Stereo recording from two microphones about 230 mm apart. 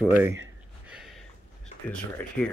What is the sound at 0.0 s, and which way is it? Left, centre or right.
Speech, centre.